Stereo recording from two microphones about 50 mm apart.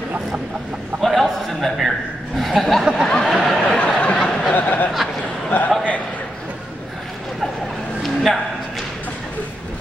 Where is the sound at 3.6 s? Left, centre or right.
Left.